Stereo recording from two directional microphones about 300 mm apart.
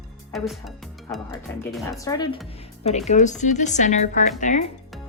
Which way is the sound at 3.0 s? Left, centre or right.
Left.